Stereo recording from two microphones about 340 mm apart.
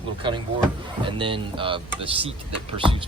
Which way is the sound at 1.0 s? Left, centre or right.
Centre.